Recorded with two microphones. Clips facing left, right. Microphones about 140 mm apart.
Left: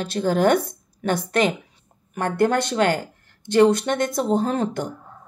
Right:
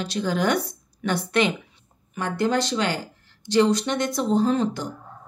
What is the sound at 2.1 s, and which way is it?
A woman's voice, 55° left (ahead or behind).